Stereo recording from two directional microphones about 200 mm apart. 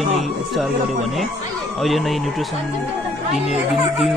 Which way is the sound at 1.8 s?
Centre (ahead or behind).